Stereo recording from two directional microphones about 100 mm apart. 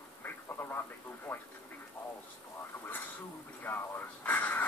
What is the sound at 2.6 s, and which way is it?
Speech, 20° left (ahead or behind).